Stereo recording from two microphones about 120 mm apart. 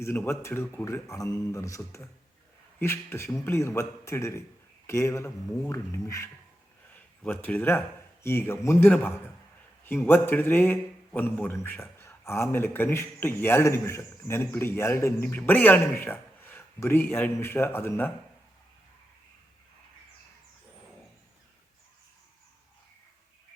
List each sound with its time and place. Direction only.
0.0 s speech: 20° left (ahead or behind)
6.9 s a man's voice: 15° left (ahead or behind)